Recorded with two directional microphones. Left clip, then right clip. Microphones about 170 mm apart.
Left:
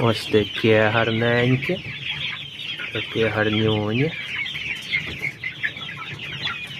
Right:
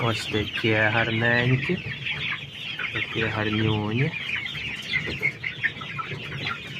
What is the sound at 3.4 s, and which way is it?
Speech, 60° left (ahead or behind).